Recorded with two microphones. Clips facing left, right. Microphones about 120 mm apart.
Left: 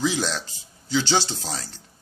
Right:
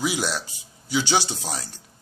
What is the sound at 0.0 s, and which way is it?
Speech, 10° right (ahead or behind).